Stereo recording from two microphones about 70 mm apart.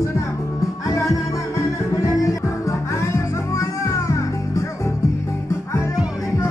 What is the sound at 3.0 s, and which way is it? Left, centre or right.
Music, left.